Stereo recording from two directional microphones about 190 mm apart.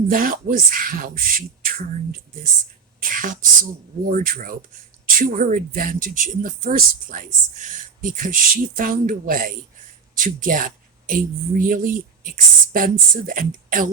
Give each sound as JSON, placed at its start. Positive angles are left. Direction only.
{"t": 0.1, "sound": "speech", "side_deg": -50}
{"t": 3.0, "sound": "speech", "side_deg": -45}